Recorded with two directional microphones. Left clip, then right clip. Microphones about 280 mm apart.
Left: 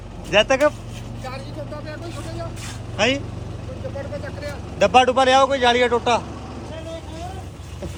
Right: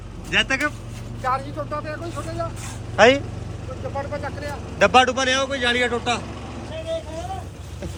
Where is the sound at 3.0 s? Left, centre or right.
Centre.